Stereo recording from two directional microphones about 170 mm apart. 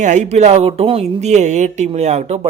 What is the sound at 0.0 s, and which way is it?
A man's voice, 45° right (ahead or behind).